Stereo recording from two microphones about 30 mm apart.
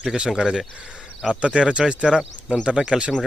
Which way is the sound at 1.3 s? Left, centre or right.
Right.